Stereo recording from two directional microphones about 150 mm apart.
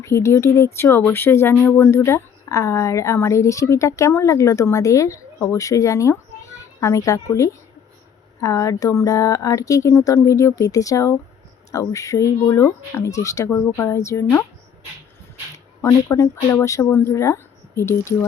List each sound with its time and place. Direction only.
0.0 s a child's voice: 20° left (ahead or behind)
15.5 s speech: 20° left (ahead or behind)